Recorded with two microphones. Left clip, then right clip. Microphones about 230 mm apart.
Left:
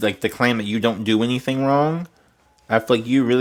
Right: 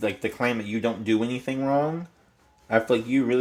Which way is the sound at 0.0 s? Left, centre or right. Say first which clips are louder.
Left 6 dB; left.